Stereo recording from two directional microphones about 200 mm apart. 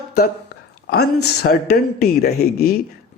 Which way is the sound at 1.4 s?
50° left (ahead or behind).